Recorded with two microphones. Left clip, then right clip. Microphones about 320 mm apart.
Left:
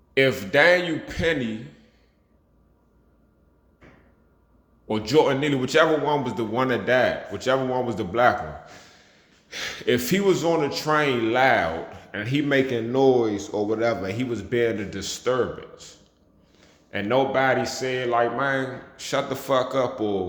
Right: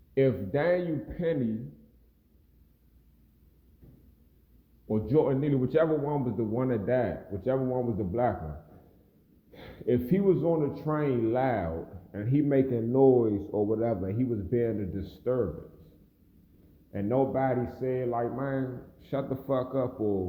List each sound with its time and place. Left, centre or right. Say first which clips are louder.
0.1 s a man's voice: left 6 dB; centre
4.9 s a man's voice: left 6 dB; centre
9.5 s a man's voice: left 6 dB; centre
13.5 s a man's voice: left 3 dB; left
13.7 s a man's voice: left 6 dB; centre
16.9 s a man's voice: left 6 dB; centre